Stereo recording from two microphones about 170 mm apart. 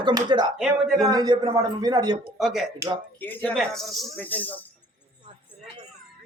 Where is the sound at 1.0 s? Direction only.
25° right (ahead or behind).